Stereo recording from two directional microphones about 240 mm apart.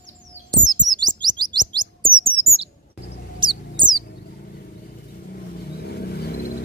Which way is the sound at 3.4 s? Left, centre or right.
Centre.